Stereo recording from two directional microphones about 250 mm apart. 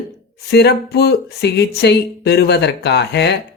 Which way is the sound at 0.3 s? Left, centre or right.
Left.